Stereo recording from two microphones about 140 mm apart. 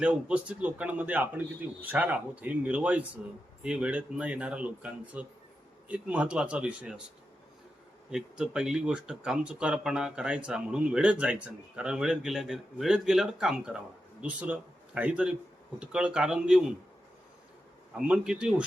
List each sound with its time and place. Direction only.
0.0 s speech: 10° right (ahead or behind)
8.1 s speech: 5° right (ahead or behind)
17.9 s speech: 5° right (ahead or behind)